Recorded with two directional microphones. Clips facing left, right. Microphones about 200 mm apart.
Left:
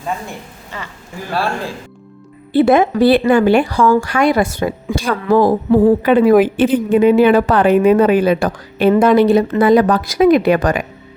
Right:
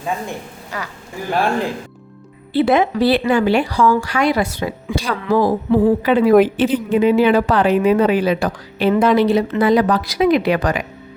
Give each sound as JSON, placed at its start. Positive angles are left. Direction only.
{"t": 1.3, "sound": "a man's voice", "side_deg": -15}
{"t": 2.5, "sound": "a woman's voice", "side_deg": 50}